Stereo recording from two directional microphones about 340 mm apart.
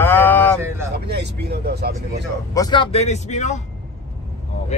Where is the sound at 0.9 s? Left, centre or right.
Right.